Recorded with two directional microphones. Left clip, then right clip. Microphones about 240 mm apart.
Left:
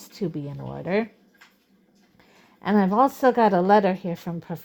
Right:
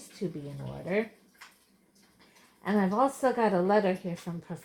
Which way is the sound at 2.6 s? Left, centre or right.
Left.